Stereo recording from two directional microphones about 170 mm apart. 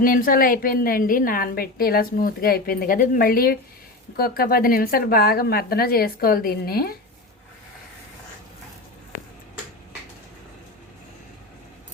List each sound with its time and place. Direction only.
0.0 s a woman's voice: 55° left (ahead or behind)